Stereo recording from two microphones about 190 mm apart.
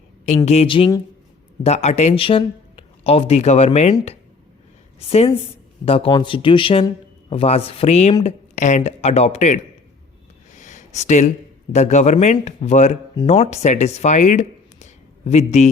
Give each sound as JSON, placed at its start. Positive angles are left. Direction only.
{"t": 0.4, "sound": "speech", "side_deg": 35}
{"t": 4.9, "sound": "a woman's voice", "side_deg": 30}
{"t": 10.5, "sound": "a sound", "side_deg": 40}
{"t": 11.7, "sound": "speech", "side_deg": 35}